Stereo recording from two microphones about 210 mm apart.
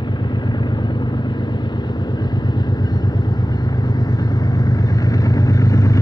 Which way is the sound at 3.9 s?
20° left (ahead or behind).